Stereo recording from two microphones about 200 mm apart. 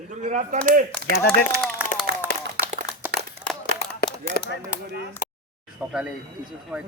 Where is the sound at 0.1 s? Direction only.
40° right (ahead or behind).